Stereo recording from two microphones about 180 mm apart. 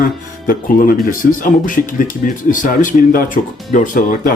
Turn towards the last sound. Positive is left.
turn(degrees=50)  # may be behind; listen again after turning